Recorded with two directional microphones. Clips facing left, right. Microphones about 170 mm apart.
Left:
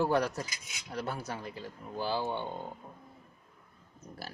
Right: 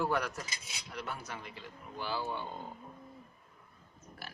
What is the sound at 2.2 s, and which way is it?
Speech, 25° left (ahead or behind).